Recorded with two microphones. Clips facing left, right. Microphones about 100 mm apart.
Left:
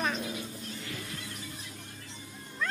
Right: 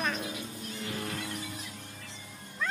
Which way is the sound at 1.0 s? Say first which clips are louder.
Right 6 dB; 55° right (ahead or behind).